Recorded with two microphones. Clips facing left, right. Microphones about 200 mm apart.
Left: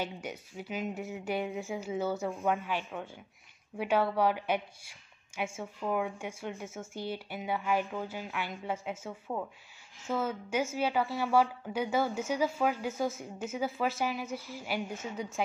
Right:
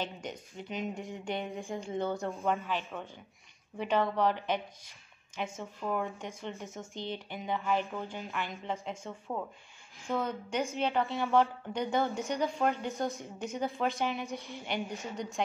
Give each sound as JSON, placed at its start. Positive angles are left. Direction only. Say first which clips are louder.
{"t": 0.0, "sound": "a woman's voice", "louder": "left 1 dB", "side_deg": 10}